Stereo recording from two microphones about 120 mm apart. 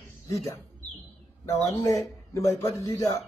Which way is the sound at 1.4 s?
25° left (ahead or behind).